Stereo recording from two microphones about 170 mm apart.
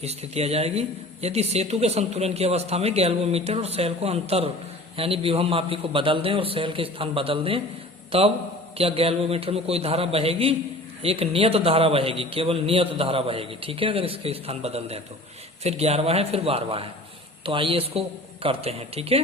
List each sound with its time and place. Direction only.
0.0 s a man's voice: 40° right (ahead or behind)
8.8 s a man's voice: 35° right (ahead or behind)